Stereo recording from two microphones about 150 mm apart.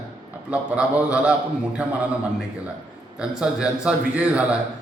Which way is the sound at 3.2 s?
5° right (ahead or behind).